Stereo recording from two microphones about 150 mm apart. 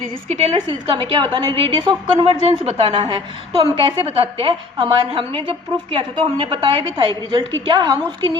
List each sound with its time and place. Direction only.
0.3 s a woman's voice: 40° right (ahead or behind)